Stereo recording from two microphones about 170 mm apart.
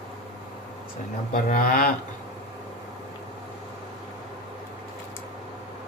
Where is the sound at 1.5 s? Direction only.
55° left (ahead or behind).